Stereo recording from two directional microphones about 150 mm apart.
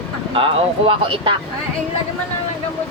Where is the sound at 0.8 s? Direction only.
35° right (ahead or behind).